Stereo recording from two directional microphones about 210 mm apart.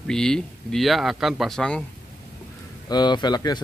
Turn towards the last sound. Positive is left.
turn(degrees=20)  # may be behind; listen again after turning